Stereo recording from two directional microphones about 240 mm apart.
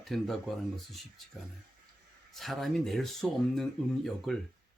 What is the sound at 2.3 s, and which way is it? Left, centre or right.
Speech, centre.